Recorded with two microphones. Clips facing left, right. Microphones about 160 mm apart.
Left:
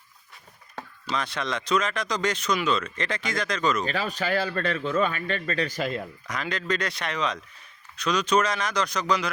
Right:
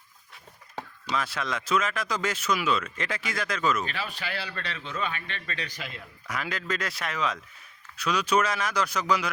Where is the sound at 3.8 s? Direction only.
40° left (ahead or behind).